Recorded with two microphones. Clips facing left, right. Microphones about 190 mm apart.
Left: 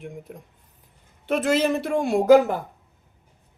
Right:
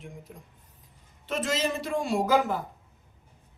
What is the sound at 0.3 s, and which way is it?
Speech, 60° left (ahead or behind).